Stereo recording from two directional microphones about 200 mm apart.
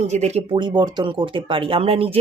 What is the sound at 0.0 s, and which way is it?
Speech, 35° right (ahead or behind).